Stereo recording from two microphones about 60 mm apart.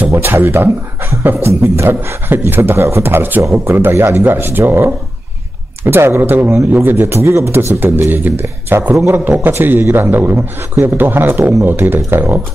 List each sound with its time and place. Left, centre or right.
0.3 s a man's voice: right
1.6 s a man's voice: right
2.2 s a man's voice: right
7.5 s a man's voice: right
8.9 s a man's voice: right
9.2 s a man's voice: right